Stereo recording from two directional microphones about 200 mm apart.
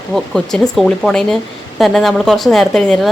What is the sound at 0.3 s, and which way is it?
A woman's voice, centre (ahead or behind).